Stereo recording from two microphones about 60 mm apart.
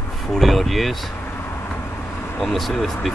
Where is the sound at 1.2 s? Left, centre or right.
Left.